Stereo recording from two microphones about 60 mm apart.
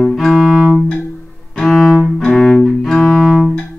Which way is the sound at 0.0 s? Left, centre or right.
Centre.